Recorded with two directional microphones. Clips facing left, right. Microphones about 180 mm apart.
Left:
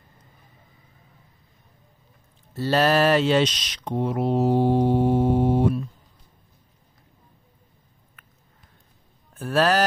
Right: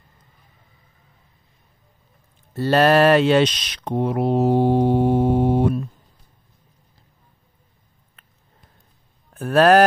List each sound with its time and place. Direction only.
2.5 s speech: 55° right (ahead or behind)
8.2 s a sound: 30° right (ahead or behind)
9.4 s speech: 60° right (ahead or behind)